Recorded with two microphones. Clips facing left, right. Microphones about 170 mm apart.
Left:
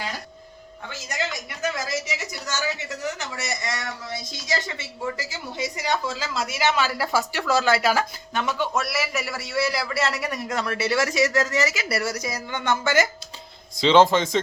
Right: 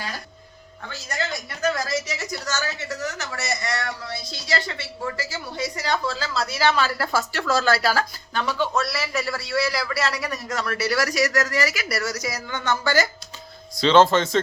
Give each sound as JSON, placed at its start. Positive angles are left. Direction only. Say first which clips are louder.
{"t": 0.9, "sound": "a woman's voice", "louder": "right 1 dB", "side_deg": 15}